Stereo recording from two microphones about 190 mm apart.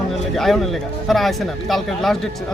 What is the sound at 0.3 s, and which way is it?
Speech, centre (ahead or behind).